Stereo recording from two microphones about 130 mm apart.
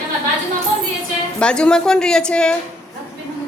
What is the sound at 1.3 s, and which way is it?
A woman's voice, 10° left (ahead or behind).